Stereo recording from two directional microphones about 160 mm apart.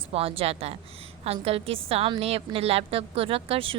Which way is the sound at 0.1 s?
35° right (ahead or behind).